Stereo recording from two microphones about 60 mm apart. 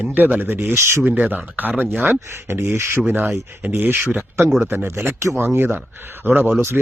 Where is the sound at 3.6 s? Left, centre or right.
Right.